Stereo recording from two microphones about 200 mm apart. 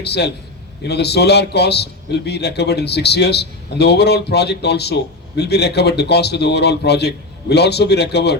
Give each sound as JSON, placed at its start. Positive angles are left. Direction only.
{"t": 0.0, "sound": "a man's voice", "side_deg": 55}